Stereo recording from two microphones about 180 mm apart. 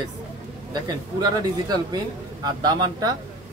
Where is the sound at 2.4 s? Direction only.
25° right (ahead or behind).